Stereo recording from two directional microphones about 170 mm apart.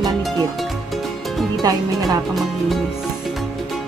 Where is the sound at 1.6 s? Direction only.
20° right (ahead or behind).